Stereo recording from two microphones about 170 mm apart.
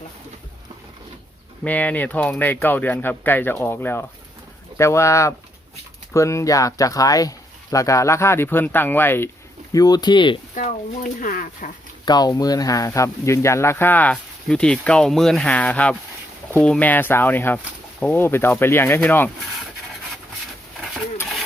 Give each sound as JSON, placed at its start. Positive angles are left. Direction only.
{"t": 1.6, "sound": "speech", "side_deg": 10}
{"t": 9.7, "sound": "speech", "side_deg": 25}
{"t": 10.5, "sound": "speech", "side_deg": 50}
{"t": 12.0, "sound": "speech", "side_deg": 25}